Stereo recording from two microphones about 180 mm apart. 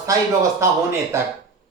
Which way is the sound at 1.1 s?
15° right (ahead or behind).